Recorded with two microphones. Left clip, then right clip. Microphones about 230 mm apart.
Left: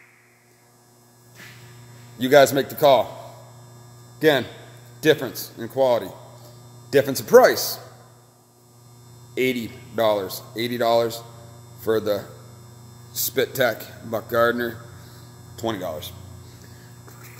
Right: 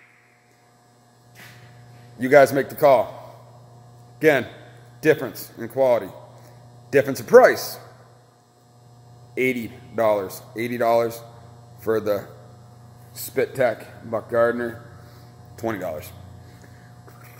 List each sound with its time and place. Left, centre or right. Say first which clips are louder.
2.1 s speech: even; centre
2.7 s a man's voice: even; centre
4.2 s a man's voice: right 1 dB; centre
9.3 s speech: even; centre
13.1 s speech: left 1 dB; centre
15.5 s speech: even; centre